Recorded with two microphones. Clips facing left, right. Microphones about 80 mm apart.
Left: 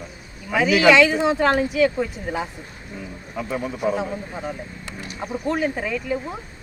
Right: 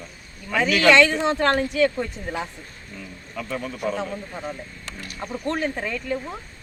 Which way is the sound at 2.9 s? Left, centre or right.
Centre.